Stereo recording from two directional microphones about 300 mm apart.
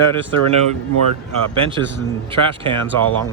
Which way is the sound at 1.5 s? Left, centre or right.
Centre.